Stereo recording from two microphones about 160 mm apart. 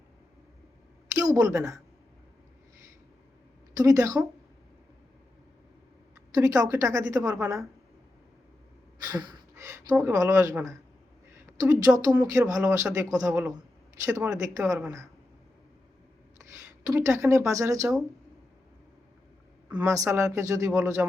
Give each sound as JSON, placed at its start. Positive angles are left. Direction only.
{"t": 1.3, "sound": "a woman's voice", "side_deg": -20}
{"t": 3.8, "sound": "a woman's voice", "side_deg": -20}
{"t": 6.3, "sound": "a woman's voice", "side_deg": -20}
{"t": 9.0, "sound": "a sound", "side_deg": -25}
{"t": 9.9, "sound": "a woman's voice", "side_deg": -15}
{"t": 11.3, "sound": "a sound", "side_deg": -20}
{"t": 11.9, "sound": "a woman's voice", "side_deg": -20}
{"t": 16.8, "sound": "a woman's voice", "side_deg": -20}
{"t": 19.7, "sound": "a woman's voice", "side_deg": -15}